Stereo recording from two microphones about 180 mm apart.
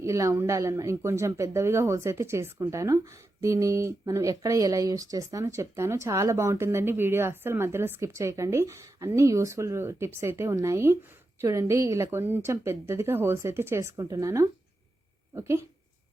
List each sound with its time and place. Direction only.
0.0 s speech: 15° right (ahead or behind)